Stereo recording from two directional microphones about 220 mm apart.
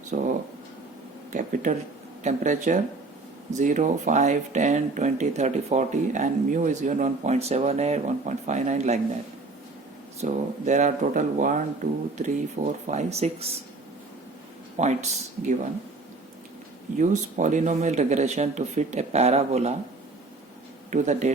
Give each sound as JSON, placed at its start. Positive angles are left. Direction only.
{"t": 0.1, "sound": "a sound", "side_deg": -35}
{"t": 1.3, "sound": "speech", "side_deg": -35}
{"t": 10.2, "sound": "speech", "side_deg": -35}
{"t": 14.8, "sound": "speech", "side_deg": -30}
{"t": 17.0, "sound": "speech", "side_deg": -35}
{"t": 20.9, "sound": "speech", "side_deg": -35}